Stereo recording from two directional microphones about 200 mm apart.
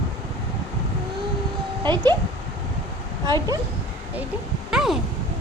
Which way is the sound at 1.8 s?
20° right (ahead or behind).